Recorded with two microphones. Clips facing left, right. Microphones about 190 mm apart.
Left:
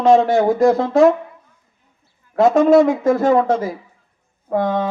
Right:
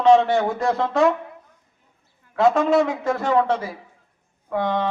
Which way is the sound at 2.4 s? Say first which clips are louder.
Left 6 dB; 45° left (ahead or behind).